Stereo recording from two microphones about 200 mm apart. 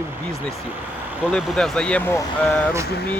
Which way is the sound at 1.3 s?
Centre (ahead or behind).